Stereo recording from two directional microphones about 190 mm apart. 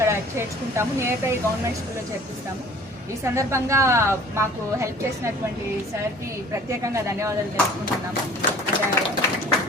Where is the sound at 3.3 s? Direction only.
15° right (ahead or behind).